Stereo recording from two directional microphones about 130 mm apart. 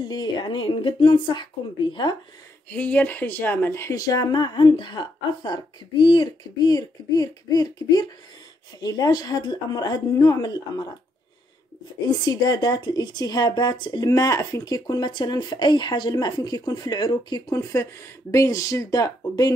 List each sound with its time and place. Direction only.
0.1 s speech: 35° left (ahead or behind)
2.7 s speech: 10° left (ahead or behind); by 10.9 s 30° left (ahead or behind)
12.1 s speech: 30° left (ahead or behind)